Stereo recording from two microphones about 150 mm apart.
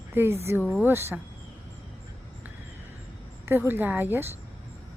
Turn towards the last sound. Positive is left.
turn(degrees=-15)  # may be behind; listen again after turning